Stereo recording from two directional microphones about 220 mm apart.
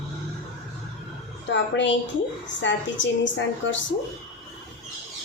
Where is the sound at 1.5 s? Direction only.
55° left (ahead or behind).